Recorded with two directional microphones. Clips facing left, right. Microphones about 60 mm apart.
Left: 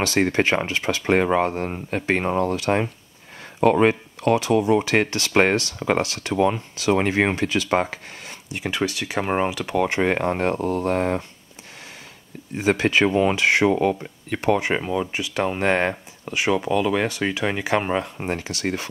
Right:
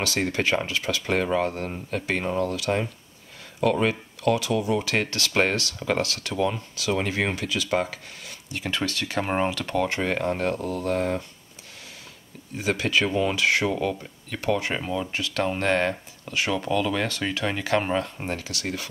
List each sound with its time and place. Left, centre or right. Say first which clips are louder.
0.0 s speech: left 5 dB; left
8.5 s speech: left 3 dB; centre
9.9 s speech: left 4 dB; left
12.5 s speech: left 5 dB; left